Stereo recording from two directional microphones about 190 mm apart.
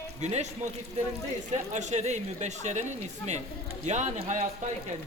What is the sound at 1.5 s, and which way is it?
Speech, 40° right (ahead or behind).